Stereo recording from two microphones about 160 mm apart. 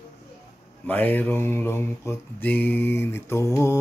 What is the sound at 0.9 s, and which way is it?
Mantra, 10° left (ahead or behind).